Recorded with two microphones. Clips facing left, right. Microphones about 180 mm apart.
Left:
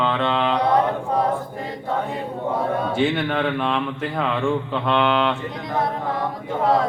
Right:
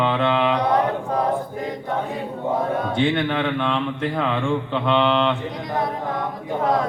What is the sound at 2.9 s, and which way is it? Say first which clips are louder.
Speech: even; 5° left (ahead or behind).